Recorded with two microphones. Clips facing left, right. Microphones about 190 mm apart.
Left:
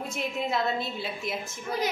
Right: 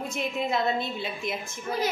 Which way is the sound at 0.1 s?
5° left (ahead or behind).